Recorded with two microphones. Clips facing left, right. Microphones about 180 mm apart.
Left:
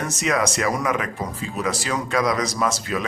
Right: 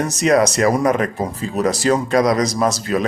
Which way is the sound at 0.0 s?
35° right (ahead or behind).